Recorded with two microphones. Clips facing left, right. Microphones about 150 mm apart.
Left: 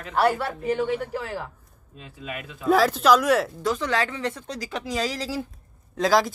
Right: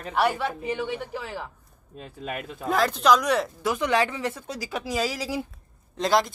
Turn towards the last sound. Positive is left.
turn(degrees=0)  # may be behind; listen again after turning